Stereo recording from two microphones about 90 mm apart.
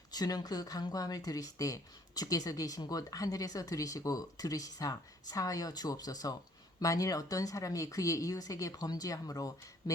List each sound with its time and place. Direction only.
0.1 s speech: 45° left (ahead or behind)